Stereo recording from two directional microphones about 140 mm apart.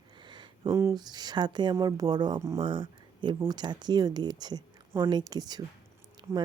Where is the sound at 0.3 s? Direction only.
35° right (ahead or behind).